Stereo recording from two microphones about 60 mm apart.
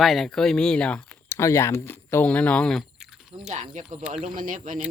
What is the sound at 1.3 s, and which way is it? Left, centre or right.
Speech, left.